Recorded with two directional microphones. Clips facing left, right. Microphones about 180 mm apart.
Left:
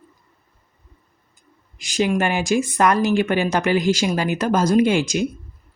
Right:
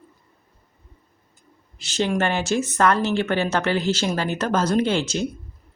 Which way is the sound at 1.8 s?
10° left (ahead or behind).